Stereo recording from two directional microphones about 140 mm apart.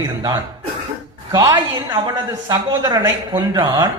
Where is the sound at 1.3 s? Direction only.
30° right (ahead or behind).